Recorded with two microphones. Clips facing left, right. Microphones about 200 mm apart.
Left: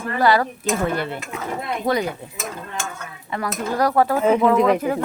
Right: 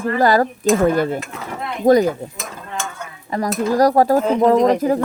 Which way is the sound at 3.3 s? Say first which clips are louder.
Right 6 dB; 40° right (ahead or behind).